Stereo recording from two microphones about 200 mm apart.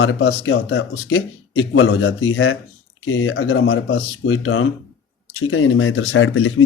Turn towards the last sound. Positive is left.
turn(degrees=85)